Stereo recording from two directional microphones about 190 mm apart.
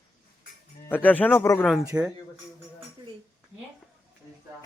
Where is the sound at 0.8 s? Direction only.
10° left (ahead or behind).